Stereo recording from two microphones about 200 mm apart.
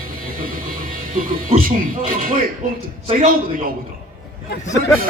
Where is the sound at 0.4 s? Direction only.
45° right (ahead or behind).